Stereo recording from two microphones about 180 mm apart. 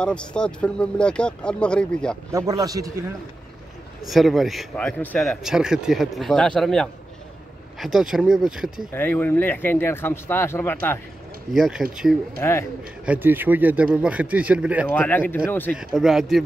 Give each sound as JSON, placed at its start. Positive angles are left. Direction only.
{"t": 0.0, "sound": "speech", "side_deg": 5}
{"t": 2.3, "sound": "a man's voice", "side_deg": -20}
{"t": 4.0, "sound": "speech", "side_deg": 0}
{"t": 5.4, "sound": "speech", "side_deg": -5}
{"t": 8.9, "sound": "speech", "side_deg": 10}
{"t": 11.5, "sound": "speech", "side_deg": 0}
{"t": 12.4, "sound": "speech", "side_deg": 15}
{"t": 13.0, "sound": "speech", "side_deg": -10}
{"t": 14.9, "sound": "speech", "side_deg": 10}
{"t": 15.8, "sound": "speech", "side_deg": 0}